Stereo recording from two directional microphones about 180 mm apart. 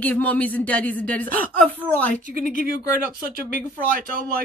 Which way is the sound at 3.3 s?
50° right (ahead or behind).